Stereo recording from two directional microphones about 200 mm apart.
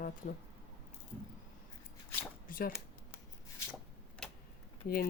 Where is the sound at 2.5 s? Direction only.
45° left (ahead or behind).